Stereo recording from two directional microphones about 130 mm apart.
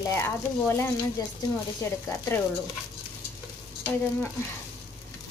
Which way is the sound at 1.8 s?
20° left (ahead or behind).